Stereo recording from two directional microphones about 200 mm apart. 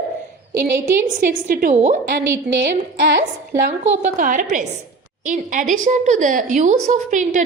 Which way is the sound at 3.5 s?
40° right (ahead or behind).